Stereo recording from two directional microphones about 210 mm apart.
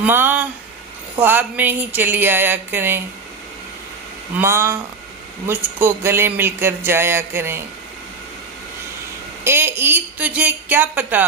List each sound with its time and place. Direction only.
0.0 s speech: 10° right (ahead or behind)
4.4 s speech: 10° right (ahead or behind)
9.4 s speech: 10° right (ahead or behind)